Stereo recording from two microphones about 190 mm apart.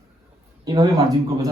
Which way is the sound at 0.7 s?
20° right (ahead or behind).